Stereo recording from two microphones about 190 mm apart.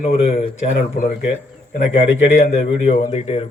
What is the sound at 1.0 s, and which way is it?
Speech, 50° left (ahead or behind).